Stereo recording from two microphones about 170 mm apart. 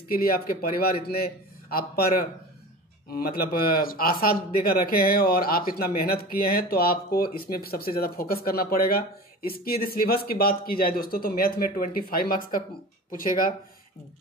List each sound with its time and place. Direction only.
0.1 s speech: 60° left (ahead or behind)